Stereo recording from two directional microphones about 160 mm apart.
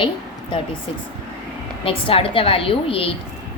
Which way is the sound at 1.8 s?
35° left (ahead or behind).